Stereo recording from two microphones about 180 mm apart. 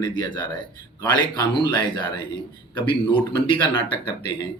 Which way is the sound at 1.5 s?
25° left (ahead or behind).